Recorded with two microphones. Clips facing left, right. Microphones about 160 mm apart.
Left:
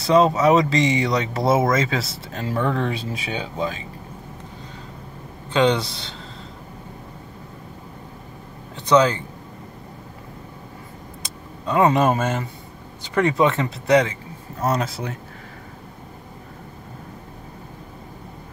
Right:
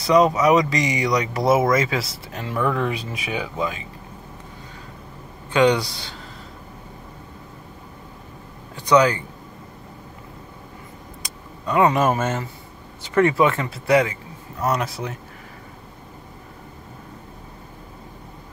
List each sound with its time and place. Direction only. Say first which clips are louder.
0.0 s speech: even; 25° left (ahead or behind)
5.5 s speech: right 1 dB; 20° left (ahead or behind)
8.7 s speech: even; 25° left (ahead or behind)
11.2 s vehicle: left 1 dB; 25° left (ahead or behind)
13.1 s speech: right 1 dB; 20° left (ahead or behind)